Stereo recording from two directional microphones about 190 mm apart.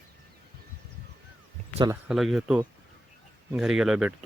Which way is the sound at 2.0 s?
Centre (ahead or behind).